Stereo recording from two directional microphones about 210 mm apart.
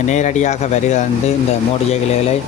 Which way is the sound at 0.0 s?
35° left (ahead or behind).